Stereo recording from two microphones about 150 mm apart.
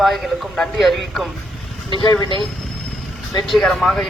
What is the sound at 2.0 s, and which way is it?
Speech, 30° left (ahead or behind).